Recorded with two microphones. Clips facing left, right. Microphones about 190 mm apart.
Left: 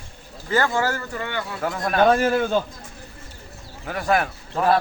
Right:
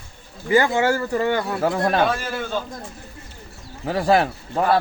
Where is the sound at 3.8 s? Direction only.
30° right (ahead or behind).